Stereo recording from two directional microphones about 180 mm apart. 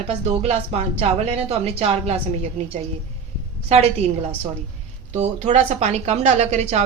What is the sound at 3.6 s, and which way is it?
Speech, 35° right (ahead or behind).